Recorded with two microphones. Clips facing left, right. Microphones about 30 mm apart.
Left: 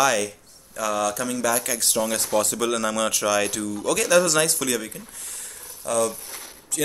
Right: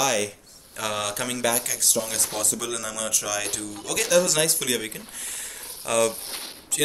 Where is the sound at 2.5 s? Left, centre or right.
Left.